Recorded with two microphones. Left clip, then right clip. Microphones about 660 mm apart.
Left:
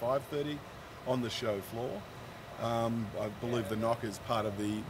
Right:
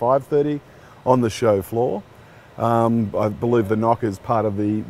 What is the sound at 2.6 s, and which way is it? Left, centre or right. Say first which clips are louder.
Speech: right 15 dB; right.